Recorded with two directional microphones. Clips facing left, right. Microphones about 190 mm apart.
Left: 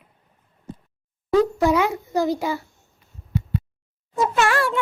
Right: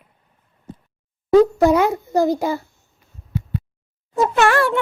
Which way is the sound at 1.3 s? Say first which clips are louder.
Right 5 dB; 45° right (ahead or behind).